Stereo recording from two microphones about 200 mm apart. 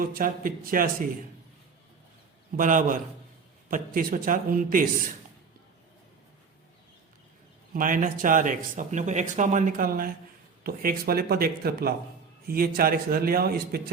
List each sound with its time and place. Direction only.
0.0 s a man's voice: 45° right (ahead or behind)
2.6 s a man's voice: 40° right (ahead or behind)
7.7 s a man's voice: 40° right (ahead or behind)